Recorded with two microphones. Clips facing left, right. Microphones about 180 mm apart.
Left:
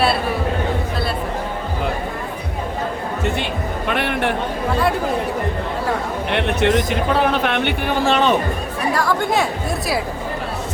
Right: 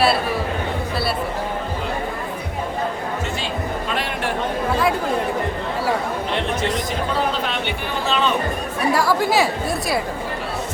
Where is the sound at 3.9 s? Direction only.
60° left (ahead or behind).